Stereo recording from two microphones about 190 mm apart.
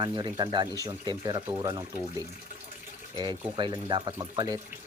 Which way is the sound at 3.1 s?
25° right (ahead or behind).